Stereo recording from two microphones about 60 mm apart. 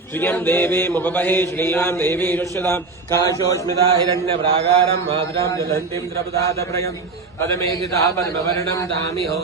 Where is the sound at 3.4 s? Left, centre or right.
Left.